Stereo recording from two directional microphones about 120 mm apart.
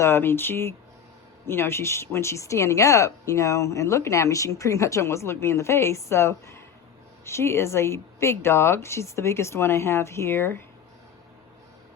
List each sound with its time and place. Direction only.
0.0 s speech: 20° left (ahead or behind)